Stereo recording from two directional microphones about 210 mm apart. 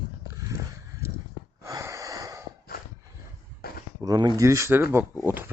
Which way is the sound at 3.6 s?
45° left (ahead or behind).